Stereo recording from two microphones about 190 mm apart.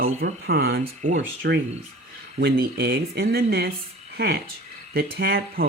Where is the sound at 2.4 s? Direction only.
60° right (ahead or behind).